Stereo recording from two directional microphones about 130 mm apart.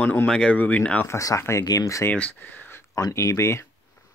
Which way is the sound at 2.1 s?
10° left (ahead or behind).